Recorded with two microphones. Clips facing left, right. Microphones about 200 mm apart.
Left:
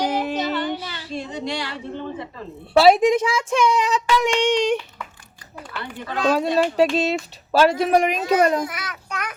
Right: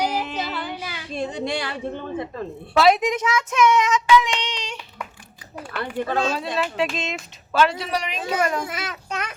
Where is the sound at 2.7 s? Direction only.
30° left (ahead or behind).